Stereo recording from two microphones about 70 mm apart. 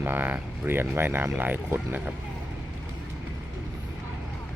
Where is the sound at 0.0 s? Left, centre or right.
Right.